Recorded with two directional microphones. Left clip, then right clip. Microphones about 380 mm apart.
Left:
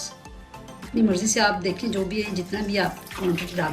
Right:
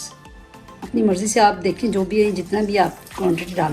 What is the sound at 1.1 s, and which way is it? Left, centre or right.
A woman's voice, centre.